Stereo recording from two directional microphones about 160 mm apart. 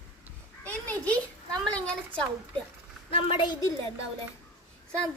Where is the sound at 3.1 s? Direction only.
35° left (ahead or behind).